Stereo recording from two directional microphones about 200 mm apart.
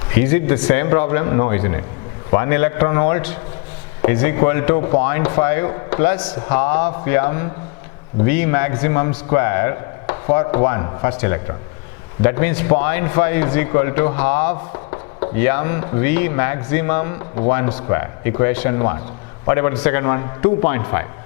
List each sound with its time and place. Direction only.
0.2 s a man's voice: 15° left (ahead or behind)